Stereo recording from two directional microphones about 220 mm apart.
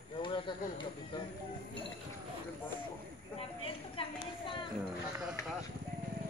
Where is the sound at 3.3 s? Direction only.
25° left (ahead or behind).